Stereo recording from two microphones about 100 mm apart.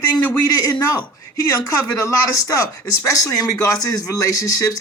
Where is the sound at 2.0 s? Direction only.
35° left (ahead or behind).